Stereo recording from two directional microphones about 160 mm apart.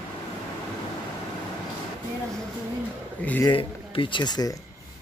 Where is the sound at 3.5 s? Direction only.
30° left (ahead or behind).